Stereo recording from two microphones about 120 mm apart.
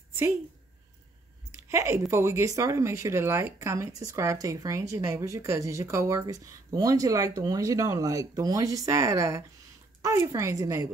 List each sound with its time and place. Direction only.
1.7 s speech: 25° right (ahead or behind)